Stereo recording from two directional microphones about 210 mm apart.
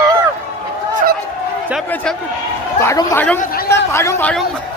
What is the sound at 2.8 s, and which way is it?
A man's voice, 15° left (ahead or behind).